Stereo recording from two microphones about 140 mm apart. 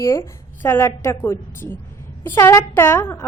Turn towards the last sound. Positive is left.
turn(degrees=20)  # may be behind; listen again after turning